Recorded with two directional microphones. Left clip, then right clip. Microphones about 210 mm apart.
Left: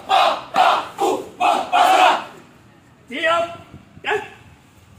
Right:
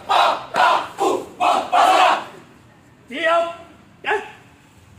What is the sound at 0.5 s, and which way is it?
Battle cry, 5° right (ahead or behind).